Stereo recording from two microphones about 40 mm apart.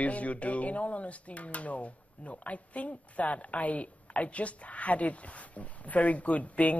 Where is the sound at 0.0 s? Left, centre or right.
Left.